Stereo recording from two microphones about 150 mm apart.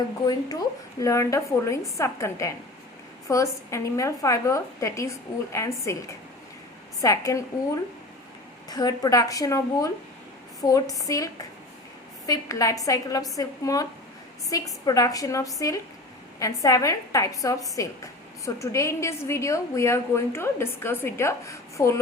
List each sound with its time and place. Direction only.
0.3 s a woman's voice: 25° left (ahead or behind)
8.7 s a woman's voice: 25° left (ahead or behind)